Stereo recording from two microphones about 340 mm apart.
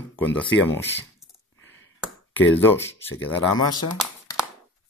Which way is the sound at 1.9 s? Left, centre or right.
Centre.